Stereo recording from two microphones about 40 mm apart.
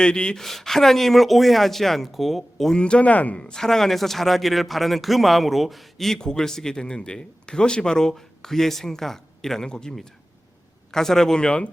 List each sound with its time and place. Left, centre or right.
0.0 s speech: left
0.3 s speech: centre
2.7 s speech: left
3.4 s a man's voice: centre
6.1 s speech: centre
10.9 s speech: centre